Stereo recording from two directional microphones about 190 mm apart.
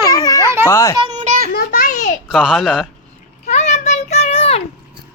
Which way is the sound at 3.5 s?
35° left (ahead or behind).